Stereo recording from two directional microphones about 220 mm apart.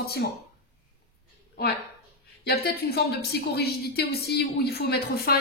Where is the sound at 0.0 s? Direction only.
45° left (ahead or behind).